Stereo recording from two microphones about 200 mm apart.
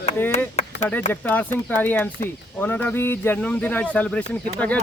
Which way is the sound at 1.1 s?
10° left (ahead or behind).